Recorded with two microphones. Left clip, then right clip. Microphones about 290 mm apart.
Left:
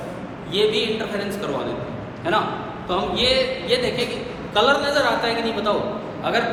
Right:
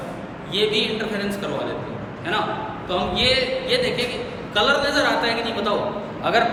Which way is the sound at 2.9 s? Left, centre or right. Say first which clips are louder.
Even; centre.